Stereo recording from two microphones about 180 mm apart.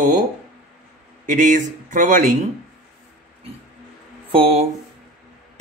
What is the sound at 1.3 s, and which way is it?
Speech, 45° right (ahead or behind).